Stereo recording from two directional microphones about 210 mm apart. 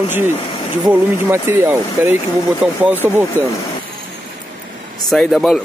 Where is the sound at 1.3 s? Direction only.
10° right (ahead or behind).